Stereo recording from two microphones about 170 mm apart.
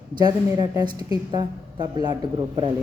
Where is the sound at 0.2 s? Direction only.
25° right (ahead or behind).